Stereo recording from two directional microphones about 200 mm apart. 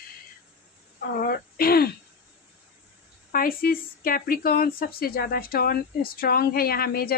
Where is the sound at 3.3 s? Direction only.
45° left (ahead or behind).